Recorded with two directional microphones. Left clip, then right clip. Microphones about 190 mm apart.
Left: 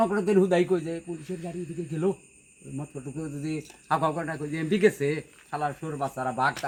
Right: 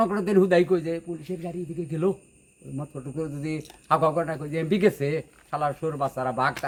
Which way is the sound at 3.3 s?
45° right (ahead or behind).